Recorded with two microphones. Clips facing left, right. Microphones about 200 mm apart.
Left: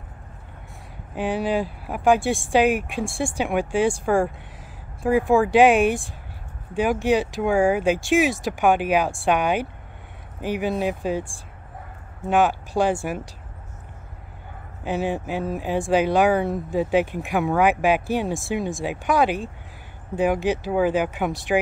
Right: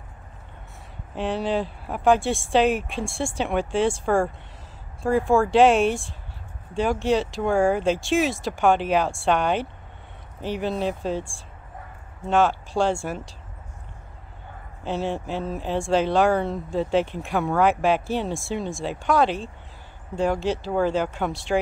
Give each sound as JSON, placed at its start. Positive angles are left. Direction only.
{"t": 1.1, "sound": "speech", "side_deg": 10}
{"t": 4.0, "sound": "speech", "side_deg": 0}
{"t": 5.3, "sound": "speech", "side_deg": 5}
{"t": 5.6, "sound": "speech", "side_deg": 15}
{"t": 7.5, "sound": "speech", "side_deg": 0}
{"t": 7.8, "sound": "speech", "side_deg": 15}
{"t": 14.8, "sound": "speech", "side_deg": 15}